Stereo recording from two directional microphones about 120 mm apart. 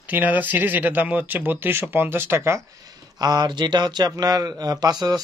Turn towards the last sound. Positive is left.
turn(degrees=-35)  # may be behind; listen again after turning